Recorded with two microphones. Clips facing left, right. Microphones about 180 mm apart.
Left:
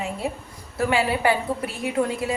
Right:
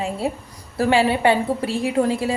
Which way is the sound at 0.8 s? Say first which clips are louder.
Right 4 dB; 30° right (ahead or behind).